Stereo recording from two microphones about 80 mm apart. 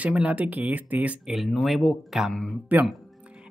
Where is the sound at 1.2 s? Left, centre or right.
Centre.